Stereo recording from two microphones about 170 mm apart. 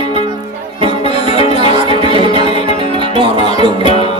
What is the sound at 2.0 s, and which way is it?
Music, 30° right (ahead or behind).